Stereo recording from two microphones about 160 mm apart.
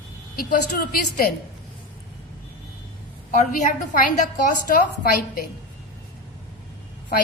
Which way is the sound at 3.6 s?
55° left (ahead or behind).